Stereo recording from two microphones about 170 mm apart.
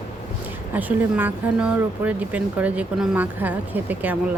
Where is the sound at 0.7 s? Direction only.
10° right (ahead or behind).